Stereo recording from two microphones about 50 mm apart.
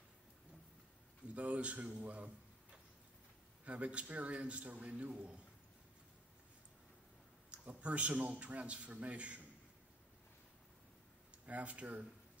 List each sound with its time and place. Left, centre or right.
1.2 s a man's voice: right
7.5 s a man's voice: right
11.4 s a man's voice: right